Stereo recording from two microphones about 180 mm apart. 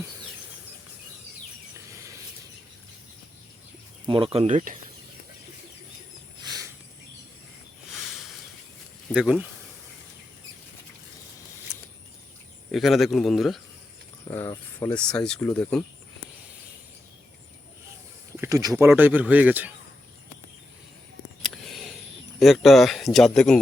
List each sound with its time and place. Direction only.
4.0 s speech: 30° right (ahead or behind)
6.4 s a sound: 20° right (ahead or behind)
7.9 s a sound: centre (ahead or behind)
9.1 s speech: 5° right (ahead or behind)
12.7 s speech: centre (ahead or behind)
14.3 s speech: 15° left (ahead or behind)
18.3 s speech: 20° right (ahead or behind)
21.4 s a sound: centre (ahead or behind)
22.4 s speech: centre (ahead or behind)